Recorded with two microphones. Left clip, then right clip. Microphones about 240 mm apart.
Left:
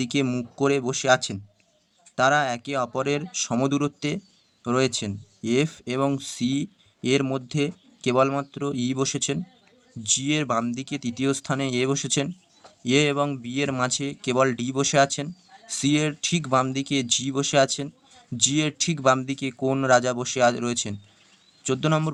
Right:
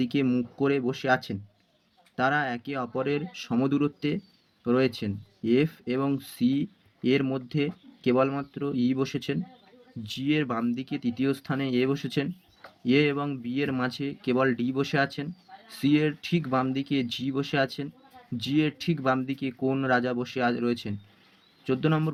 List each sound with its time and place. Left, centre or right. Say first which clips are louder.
0.1 s speech: left 1 dB; left